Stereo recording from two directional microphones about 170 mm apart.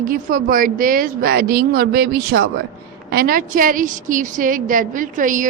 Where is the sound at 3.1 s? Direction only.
60° right (ahead or behind).